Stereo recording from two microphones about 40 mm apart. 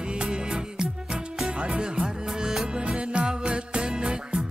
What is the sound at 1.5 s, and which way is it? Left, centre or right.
Music, right.